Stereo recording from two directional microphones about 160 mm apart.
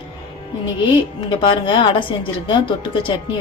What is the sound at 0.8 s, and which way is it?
A woman's voice, 30° left (ahead or behind).